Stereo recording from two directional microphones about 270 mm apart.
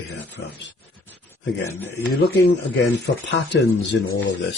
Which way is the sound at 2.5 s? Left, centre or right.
Left.